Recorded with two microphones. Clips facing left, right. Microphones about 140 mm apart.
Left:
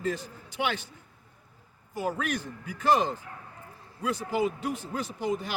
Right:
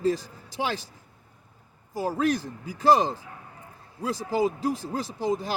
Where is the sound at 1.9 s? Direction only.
35° right (ahead or behind).